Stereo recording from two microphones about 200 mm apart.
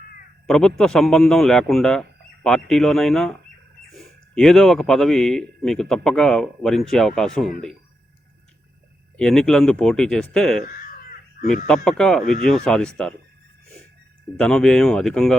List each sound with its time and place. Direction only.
0.4 s speech: 5° left (ahead or behind)
4.4 s speech: centre (ahead or behind)
9.1 s speech: 5° left (ahead or behind)
11.4 s speech: 45° left (ahead or behind)
11.7 s speech: 5° left (ahead or behind)
14.3 s speech: 5° left (ahead or behind)